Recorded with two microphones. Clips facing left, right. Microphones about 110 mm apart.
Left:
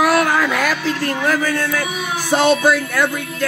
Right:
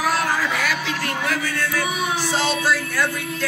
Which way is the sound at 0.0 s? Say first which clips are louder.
Left 6 dB; 70° left (ahead or behind).